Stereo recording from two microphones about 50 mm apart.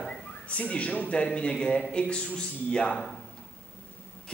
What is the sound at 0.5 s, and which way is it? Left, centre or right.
A man's voice, left.